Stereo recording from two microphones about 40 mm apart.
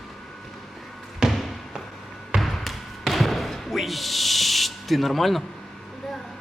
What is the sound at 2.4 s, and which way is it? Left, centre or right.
Basketball bounce, centre.